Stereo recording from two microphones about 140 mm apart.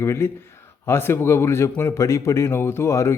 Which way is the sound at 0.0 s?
20° left (ahead or behind).